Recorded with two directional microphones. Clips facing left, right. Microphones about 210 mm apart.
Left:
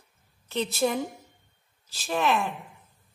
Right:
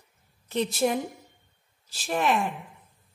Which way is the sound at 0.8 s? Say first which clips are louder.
Even; 10° right (ahead or behind).